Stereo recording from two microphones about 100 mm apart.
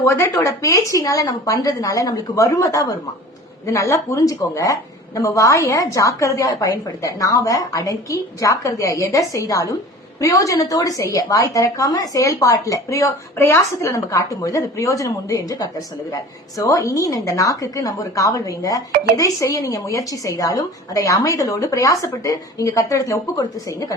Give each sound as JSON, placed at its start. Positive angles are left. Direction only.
{"t": 0.0, "sound": "a woman's voice", "side_deg": 35}